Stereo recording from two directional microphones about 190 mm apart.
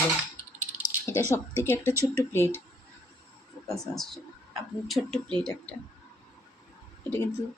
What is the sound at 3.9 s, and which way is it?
Speech, centre (ahead or behind).